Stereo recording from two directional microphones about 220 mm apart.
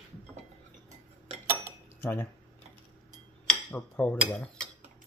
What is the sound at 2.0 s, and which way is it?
Speech, 10° left (ahead or behind).